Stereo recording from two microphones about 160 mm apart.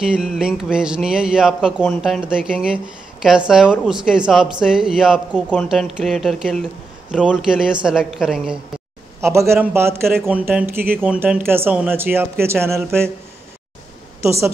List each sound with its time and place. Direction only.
0.0 s speech: 5° right (ahead or behind)
9.2 s speech: 15° right (ahead or behind)